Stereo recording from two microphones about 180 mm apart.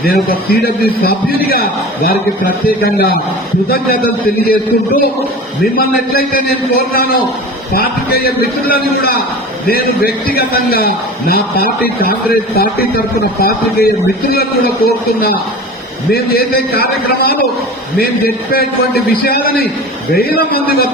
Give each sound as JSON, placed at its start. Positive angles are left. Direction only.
{"t": 0.0, "sound": "a man's voice", "side_deg": 55}
{"t": 14.8, "sound": "a man's voice", "side_deg": 60}
{"t": 18.5, "sound": "a man's voice", "side_deg": 60}